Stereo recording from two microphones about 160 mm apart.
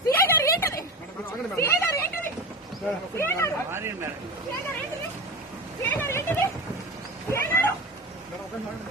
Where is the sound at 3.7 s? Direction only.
15° right (ahead or behind).